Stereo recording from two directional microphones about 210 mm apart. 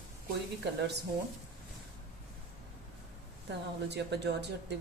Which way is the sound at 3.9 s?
55° right (ahead or behind).